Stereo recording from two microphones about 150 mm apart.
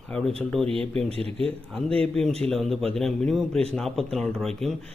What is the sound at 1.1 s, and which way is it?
Speech, 40° right (ahead or behind).